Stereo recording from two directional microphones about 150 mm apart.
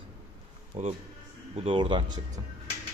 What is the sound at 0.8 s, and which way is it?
Speech, 50° right (ahead or behind).